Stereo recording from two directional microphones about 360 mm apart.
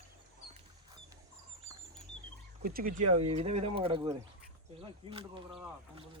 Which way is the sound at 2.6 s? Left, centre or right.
Right.